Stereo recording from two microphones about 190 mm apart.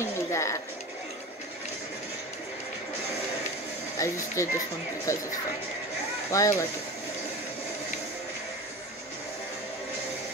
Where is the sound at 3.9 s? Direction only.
15° left (ahead or behind).